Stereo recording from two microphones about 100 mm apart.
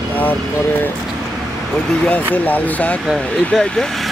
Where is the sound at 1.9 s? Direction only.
15° left (ahead or behind).